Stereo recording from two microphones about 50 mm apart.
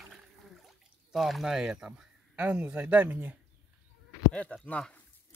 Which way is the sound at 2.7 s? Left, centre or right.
Right.